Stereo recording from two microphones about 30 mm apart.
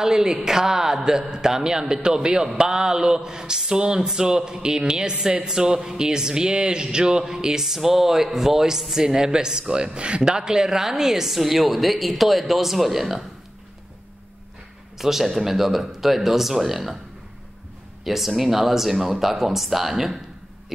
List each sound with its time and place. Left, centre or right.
0.0 s a woman's voice: centre
10.4 s a woman's voice: right
15.0 s a woman's voice: centre
18.0 s a woman's voice: centre